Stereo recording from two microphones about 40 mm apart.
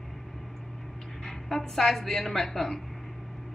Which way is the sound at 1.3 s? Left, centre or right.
Centre.